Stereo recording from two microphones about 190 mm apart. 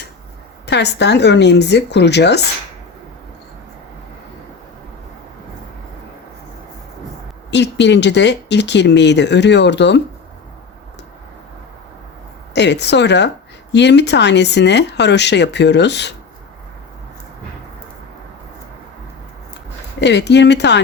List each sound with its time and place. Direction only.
0.7 s speech: 65° left (ahead or behind)
7.5 s speech: 65° left (ahead or behind)
12.5 s speech: 65° left (ahead or behind)
20.0 s speech: 65° left (ahead or behind)